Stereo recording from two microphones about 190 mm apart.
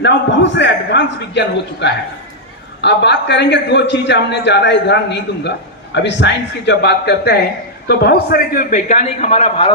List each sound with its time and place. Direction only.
0.0 s a man's voice: 70° left (ahead or behind); by 9.7 s 30° left (ahead or behind)